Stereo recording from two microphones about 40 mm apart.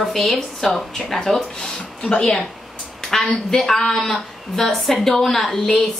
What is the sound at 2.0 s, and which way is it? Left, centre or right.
Speech, centre.